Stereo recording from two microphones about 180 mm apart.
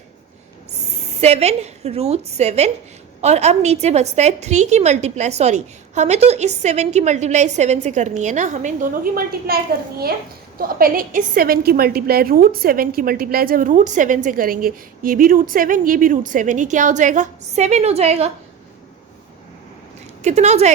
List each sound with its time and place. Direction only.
1.2 s a woman's voice: 35° right (ahead or behind)
10.6 s a woman's voice: 55° right (ahead or behind); by 18.3 s 35° right (ahead or behind)
20.2 s a woman's voice: 40° right (ahead or behind)